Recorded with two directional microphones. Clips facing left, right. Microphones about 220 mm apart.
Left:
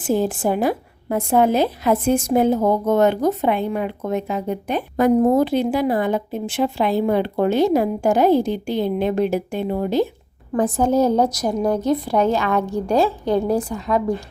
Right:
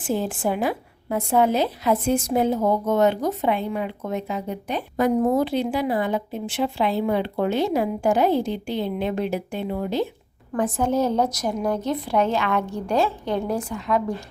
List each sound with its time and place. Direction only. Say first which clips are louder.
0.0 s a woman's voice: left 5 dB; 45° left (ahead or behind)